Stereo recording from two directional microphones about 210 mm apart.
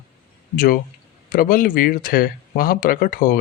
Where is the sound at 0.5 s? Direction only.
40° left (ahead or behind).